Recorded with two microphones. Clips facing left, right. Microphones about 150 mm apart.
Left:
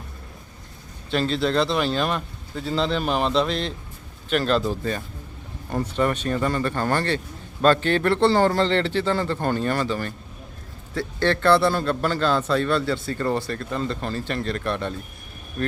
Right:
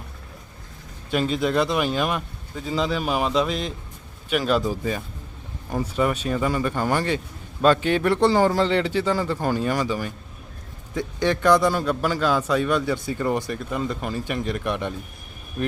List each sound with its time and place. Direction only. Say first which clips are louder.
1.1 s a man's voice: even; 10° right (ahead or behind)